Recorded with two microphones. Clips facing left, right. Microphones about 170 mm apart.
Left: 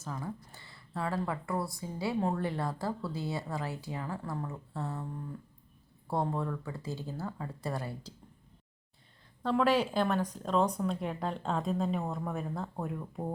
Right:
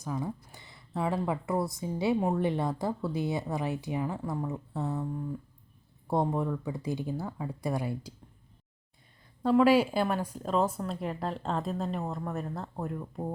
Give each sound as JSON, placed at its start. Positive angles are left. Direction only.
{"t": 0.0, "sound": "a woman's voice", "side_deg": -15}
{"t": 9.4, "sound": "speech", "side_deg": -10}